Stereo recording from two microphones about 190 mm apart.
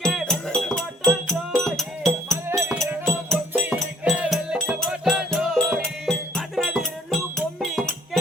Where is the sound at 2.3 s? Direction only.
15° right (ahead or behind).